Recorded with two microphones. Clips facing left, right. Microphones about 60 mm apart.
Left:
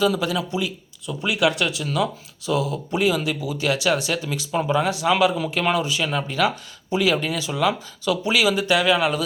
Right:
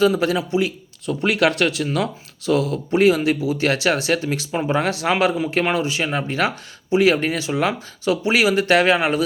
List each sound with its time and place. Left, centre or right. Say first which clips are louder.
0.2 s speech: right 4 dB; right
1.0 s speech: right 3 dB; right
4.5 s speech: left 1 dB; right
4.8 s speech: even; right
5.6 s speech: right 1 dB; right
8.6 s speech: right 3 dB; right
9.0 s speech: right 2 dB; right